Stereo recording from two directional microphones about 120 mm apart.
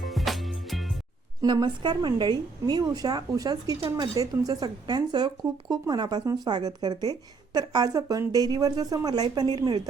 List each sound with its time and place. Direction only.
0.0 s music: centre (ahead or behind)
1.4 s a woman's voice: 35° right (ahead or behind)